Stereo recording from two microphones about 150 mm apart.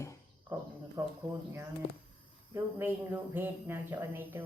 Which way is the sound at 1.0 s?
20° right (ahead or behind).